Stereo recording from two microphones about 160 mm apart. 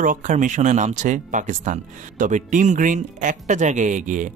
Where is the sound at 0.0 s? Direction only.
55° right (ahead or behind).